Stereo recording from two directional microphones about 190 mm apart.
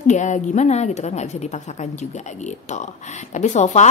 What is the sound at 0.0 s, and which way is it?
A woman's voice, 40° left (ahead or behind).